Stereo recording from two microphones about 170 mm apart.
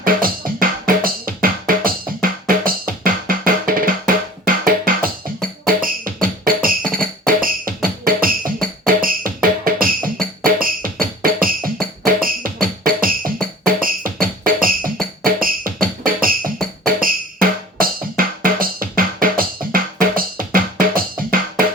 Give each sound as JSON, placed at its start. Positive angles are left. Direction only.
{"t": 0.0, "sound": "music", "side_deg": -55}